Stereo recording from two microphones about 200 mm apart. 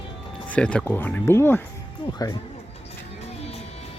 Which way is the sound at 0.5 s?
5° left (ahead or behind).